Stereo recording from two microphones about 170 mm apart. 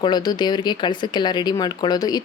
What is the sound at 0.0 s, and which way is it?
Speech, 25° left (ahead or behind).